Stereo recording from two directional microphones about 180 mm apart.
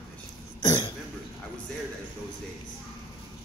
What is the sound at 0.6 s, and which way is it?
Cough, 20° left (ahead or behind).